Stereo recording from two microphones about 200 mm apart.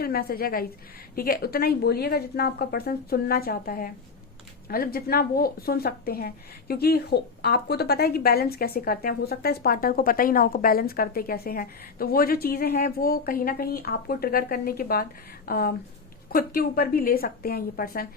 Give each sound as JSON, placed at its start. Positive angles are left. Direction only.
{"t": 0.0, "sound": "speech", "side_deg": 50}